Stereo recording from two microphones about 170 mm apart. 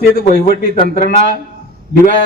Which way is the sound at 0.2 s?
60° right (ahead or behind).